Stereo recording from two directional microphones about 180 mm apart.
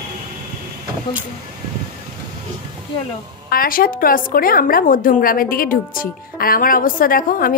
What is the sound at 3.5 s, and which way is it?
A woman's voice, 50° left (ahead or behind).